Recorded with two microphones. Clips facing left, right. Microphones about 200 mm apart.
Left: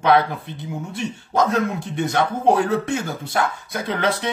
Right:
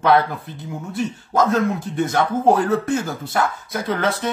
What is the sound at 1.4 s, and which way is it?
Speech, 5° right (ahead or behind).